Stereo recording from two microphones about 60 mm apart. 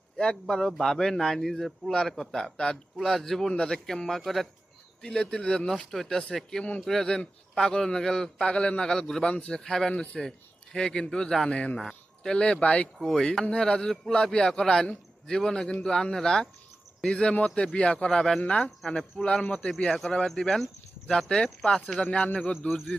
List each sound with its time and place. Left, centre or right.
0.2 s speech: centre
9.2 s a man's voice: centre
11.4 s speech: centre
13.0 s speech: centre
18.3 s a man's voice: left